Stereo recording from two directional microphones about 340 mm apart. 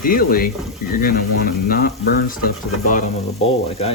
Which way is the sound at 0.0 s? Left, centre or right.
Left.